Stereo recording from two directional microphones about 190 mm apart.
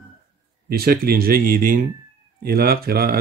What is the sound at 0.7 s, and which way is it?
Speech, 50° right (ahead or behind).